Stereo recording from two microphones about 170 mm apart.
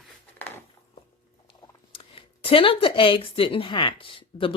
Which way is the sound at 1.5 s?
35° left (ahead or behind).